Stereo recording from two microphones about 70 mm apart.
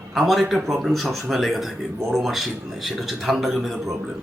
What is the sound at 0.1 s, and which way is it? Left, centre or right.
Speech, centre.